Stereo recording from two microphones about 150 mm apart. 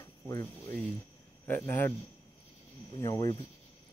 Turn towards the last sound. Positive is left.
turn(degrees=25)  # may be behind; listen again after turning